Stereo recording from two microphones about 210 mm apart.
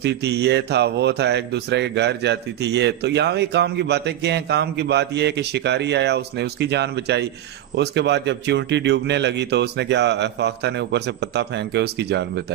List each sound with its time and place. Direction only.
0.0 s a man's voice: 50° right (ahead or behind)